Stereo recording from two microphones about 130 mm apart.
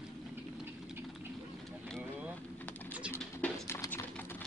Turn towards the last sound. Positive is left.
turn(degrees=20)  # may be behind; listen again after turning